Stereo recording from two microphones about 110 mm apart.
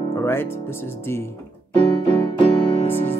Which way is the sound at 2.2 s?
55° left (ahead or behind).